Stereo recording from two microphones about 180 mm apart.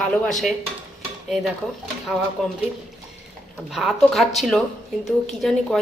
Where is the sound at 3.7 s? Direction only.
Centre (ahead or behind).